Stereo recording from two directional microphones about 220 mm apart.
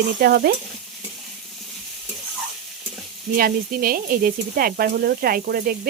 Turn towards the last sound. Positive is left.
turn(degrees=-40)  # may be behind; listen again after turning